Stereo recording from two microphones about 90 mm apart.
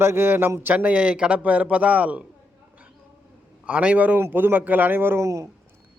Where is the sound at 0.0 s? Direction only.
25° right (ahead or behind).